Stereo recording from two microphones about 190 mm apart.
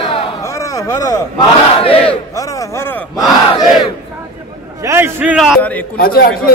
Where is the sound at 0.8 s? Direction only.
15° left (ahead or behind).